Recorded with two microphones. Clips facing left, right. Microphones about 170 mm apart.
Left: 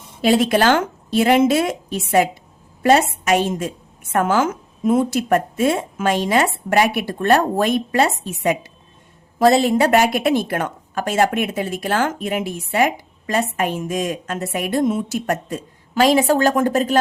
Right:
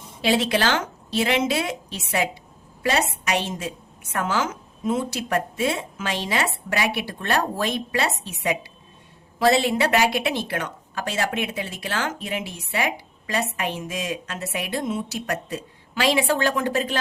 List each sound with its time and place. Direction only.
0.2 s a woman's voice: 45° left (ahead or behind)